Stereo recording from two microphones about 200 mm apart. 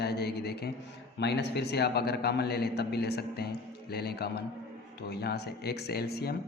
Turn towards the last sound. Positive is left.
turn(degrees=50)  # may be behind; listen again after turning